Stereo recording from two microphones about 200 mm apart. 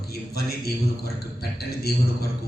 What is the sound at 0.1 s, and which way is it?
A man's voice, 50° left (ahead or behind).